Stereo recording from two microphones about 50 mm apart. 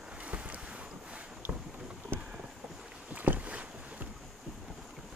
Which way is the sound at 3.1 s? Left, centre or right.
Right.